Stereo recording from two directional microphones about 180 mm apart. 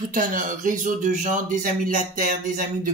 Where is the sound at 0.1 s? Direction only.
50° right (ahead or behind).